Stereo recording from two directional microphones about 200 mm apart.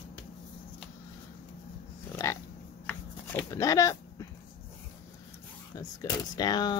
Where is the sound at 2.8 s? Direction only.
10° left (ahead or behind).